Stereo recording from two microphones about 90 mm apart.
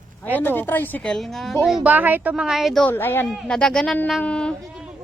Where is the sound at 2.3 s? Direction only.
5° right (ahead or behind).